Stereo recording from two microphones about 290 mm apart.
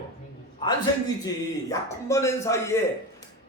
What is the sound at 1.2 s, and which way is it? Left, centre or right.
Speech, centre.